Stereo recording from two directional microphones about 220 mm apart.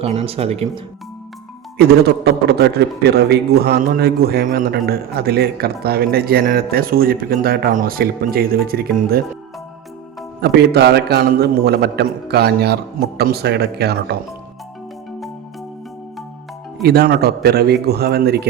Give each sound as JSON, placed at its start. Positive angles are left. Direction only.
{"t": 0.0, "sound": "speech", "side_deg": -30}
{"t": 1.8, "sound": "a man's voice", "side_deg": -45}
{"t": 10.4, "sound": "a man's voice", "side_deg": -50}
{"t": 16.8, "sound": "a man's voice", "side_deg": -45}